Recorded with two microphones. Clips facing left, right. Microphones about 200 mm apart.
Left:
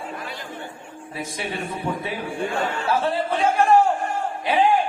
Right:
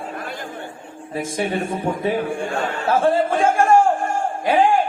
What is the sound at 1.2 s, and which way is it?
A man's voice, 50° right (ahead or behind).